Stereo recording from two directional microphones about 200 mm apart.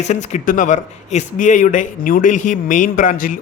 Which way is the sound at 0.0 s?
35° left (ahead or behind).